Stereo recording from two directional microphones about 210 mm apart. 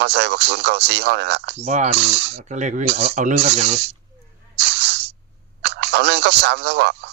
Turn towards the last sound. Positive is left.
turn(degrees=-55)  # may be behind; listen again after turning